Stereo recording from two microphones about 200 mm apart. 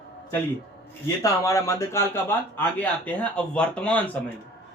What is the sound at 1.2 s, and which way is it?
Speech, 15° left (ahead or behind).